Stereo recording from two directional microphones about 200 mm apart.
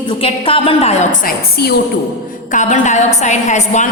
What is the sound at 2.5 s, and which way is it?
A woman's voice, 40° left (ahead or behind).